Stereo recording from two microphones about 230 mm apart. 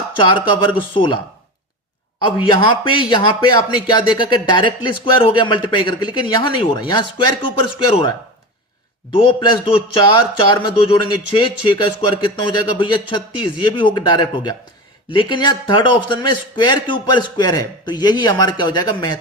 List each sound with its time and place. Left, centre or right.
0.2 s speech: left
2.2 s speech: left
9.1 s speech: left